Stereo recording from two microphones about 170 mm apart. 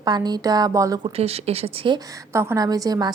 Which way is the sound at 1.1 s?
35° right (ahead or behind).